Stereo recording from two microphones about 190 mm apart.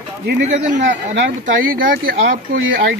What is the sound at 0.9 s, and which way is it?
Speech, 70° right (ahead or behind).